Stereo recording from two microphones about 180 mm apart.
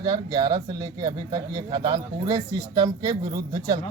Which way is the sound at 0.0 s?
25° right (ahead or behind).